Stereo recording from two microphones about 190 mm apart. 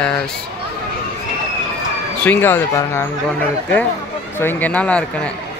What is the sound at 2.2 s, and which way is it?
A man's voice, 10° left (ahead or behind).